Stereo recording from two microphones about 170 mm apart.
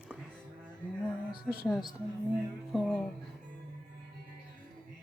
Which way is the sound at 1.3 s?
70° left (ahead or behind).